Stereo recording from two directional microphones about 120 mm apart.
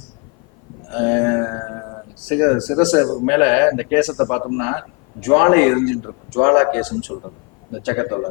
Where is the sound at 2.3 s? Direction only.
15° left (ahead or behind).